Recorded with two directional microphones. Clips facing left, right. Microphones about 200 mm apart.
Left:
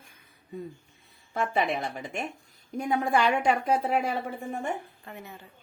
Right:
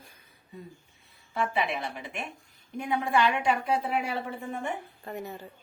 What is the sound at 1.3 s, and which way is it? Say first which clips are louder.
A woman's voice: left 2 dB; 45° left (ahead or behind).